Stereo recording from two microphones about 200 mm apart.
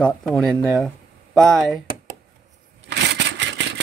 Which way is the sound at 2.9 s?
60° right (ahead or behind).